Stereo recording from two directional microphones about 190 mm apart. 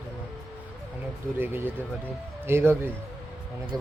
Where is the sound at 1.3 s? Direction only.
10° right (ahead or behind).